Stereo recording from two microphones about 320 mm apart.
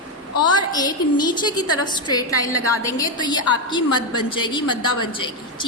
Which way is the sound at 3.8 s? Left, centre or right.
Left.